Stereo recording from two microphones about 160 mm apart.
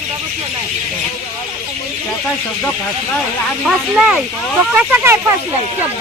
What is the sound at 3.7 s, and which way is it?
Speech, 5° right (ahead or behind).